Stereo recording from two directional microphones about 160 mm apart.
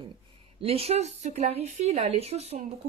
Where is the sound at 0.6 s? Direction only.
40° right (ahead or behind).